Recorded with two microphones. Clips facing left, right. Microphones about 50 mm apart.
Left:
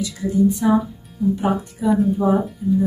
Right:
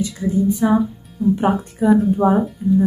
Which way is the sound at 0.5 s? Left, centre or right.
Centre.